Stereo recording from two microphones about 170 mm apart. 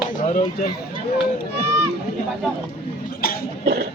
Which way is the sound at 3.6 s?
75° right (ahead or behind).